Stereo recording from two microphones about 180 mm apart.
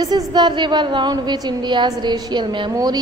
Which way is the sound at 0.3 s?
25° right (ahead or behind).